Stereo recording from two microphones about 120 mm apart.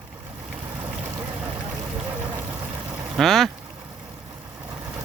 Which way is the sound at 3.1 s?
Centre (ahead or behind).